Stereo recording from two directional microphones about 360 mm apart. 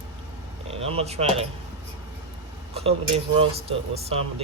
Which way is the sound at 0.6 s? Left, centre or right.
Centre.